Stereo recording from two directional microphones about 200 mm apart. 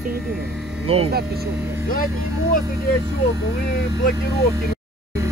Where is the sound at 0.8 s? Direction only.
30° right (ahead or behind).